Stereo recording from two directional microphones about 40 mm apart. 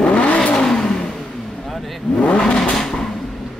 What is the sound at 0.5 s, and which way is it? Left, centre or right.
Vehicle, centre.